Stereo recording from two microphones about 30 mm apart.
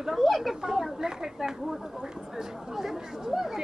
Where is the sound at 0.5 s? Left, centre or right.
Centre.